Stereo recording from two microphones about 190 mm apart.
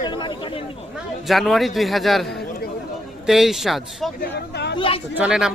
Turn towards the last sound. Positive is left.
turn(degrees=-5)  # may be behind; listen again after turning